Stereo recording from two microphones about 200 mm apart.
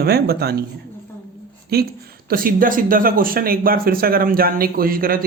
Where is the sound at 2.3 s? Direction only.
45° right (ahead or behind).